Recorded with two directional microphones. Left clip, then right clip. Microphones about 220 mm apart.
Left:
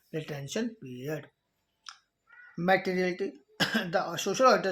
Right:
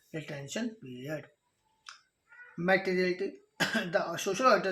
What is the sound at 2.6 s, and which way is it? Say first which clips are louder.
Speech: left 1 dB; 45° left (ahead or behind).